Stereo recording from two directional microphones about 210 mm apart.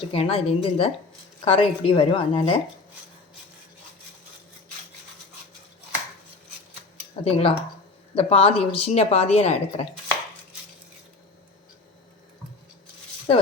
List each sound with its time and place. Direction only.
0.1 s a woman's voice: 25° left (ahead or behind)
7.3 s a woman's voice: 30° left (ahead or behind)